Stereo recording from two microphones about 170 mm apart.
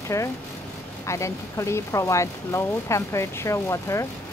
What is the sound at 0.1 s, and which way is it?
Speech, 15° left (ahead or behind).